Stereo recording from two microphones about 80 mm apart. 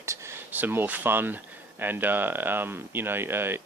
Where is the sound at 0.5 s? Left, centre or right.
Right.